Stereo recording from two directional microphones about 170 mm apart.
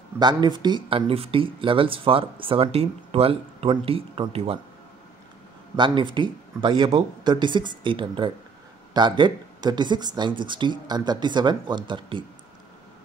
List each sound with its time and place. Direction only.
0.2 s speech: 25° right (ahead or behind)
5.8 s speech: 30° right (ahead or behind)